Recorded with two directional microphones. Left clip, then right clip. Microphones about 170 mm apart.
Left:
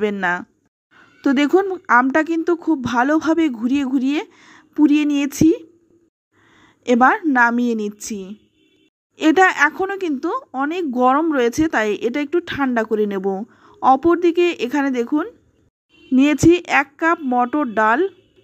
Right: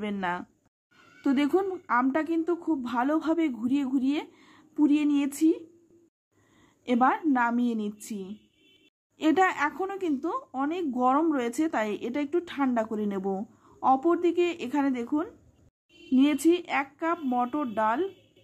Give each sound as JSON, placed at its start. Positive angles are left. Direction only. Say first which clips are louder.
{"t": 0.0, "sound": "speech", "louder": "left 11 dB", "side_deg": 30}
{"t": 6.5, "sound": "a sound", "louder": "left 11 dB", "side_deg": 30}
{"t": 7.3, "sound": "speech", "louder": "left 11 dB", "side_deg": 30}